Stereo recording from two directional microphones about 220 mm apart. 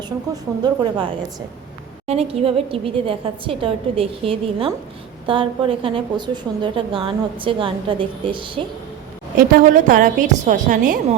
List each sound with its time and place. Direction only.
0.6 s a woman's voice: 20° right (ahead or behind)
2.0 s a woman's voice: 25° right (ahead or behind)
9.4 s a woman's voice: 40° right (ahead or behind)